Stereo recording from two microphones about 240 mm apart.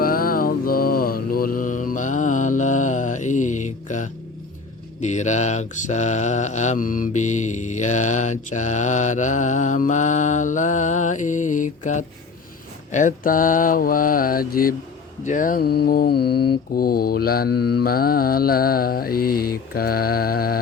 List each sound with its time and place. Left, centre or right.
0.0 s mantra: left